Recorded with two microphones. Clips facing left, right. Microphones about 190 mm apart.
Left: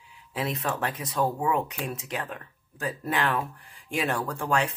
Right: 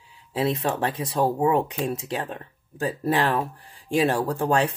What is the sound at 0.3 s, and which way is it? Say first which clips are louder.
Speech: right 6 dB; 30° right (ahead or behind).